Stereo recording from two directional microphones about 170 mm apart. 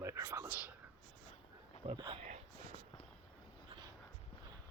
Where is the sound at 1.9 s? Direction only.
25° right (ahead or behind).